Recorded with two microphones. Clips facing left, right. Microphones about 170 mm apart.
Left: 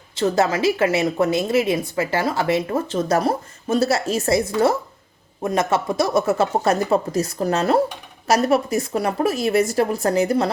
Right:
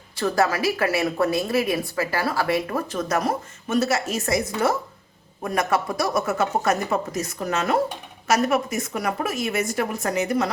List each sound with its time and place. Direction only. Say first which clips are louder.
0.2 s a woman's voice: left 3 dB; 20° left (ahead or behind)